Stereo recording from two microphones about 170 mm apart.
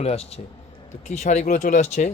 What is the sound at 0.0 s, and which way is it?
A man's voice, 35° left (ahead or behind).